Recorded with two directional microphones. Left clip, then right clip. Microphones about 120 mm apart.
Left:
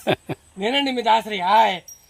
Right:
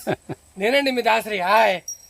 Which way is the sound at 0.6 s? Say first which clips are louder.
Right 2 dB; 30° right (ahead or behind).